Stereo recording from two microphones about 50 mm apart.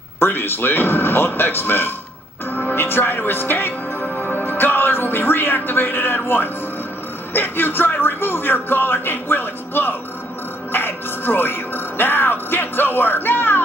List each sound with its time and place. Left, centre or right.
0.2 s speech: left
4.0 s music: left
7.3 s speech: left
10.7 s music: left